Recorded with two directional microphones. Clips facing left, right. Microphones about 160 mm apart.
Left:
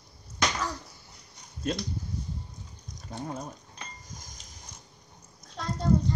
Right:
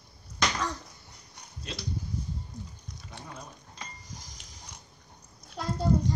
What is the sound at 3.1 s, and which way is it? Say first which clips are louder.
Speech: left 9 dB; 45° left (ahead or behind).